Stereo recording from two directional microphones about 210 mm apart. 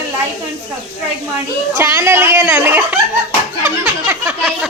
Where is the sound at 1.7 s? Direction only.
10° right (ahead or behind).